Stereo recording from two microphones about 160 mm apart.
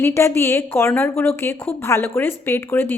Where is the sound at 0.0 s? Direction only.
15° left (ahead or behind).